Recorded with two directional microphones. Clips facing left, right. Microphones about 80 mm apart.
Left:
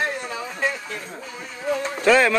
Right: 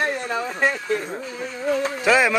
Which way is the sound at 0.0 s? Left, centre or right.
Right.